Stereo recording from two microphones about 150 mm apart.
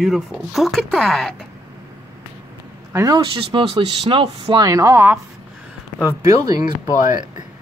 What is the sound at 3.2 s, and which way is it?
Speech, 35° right (ahead or behind).